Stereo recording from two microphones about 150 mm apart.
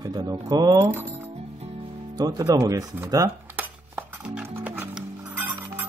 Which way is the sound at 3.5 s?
10° right (ahead or behind).